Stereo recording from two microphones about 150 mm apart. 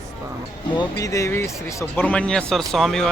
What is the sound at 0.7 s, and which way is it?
Speech, 25° left (ahead or behind).